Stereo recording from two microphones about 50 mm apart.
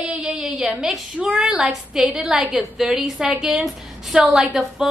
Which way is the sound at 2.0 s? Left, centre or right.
Centre.